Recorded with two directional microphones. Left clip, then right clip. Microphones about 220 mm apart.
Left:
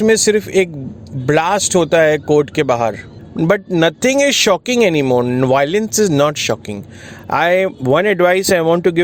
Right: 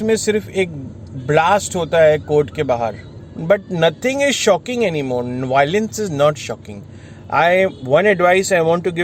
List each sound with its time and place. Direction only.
0.0 s speech: 45° left (ahead or behind)